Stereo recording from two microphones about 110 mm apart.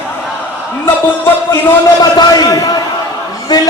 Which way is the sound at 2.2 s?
40° left (ahead or behind).